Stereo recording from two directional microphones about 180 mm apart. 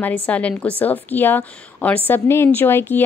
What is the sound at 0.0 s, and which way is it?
Speech, 10° left (ahead or behind).